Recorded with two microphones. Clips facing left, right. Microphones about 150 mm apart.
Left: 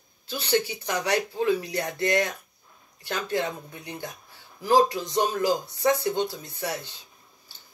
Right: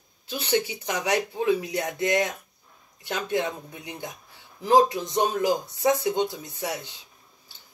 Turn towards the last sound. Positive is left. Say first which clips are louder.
# even
turn(degrees=-15)  # may be behind; listen again after turning